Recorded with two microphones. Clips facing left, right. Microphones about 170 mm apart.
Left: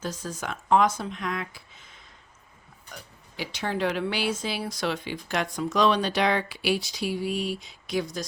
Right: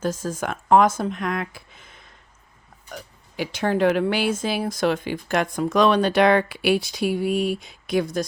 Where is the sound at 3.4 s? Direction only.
50° right (ahead or behind).